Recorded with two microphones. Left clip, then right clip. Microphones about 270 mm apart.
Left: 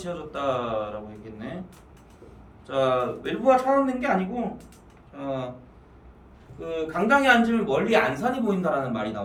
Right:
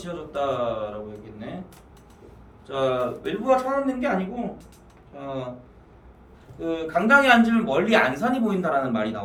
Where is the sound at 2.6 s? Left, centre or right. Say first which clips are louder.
Left 1 dB; centre.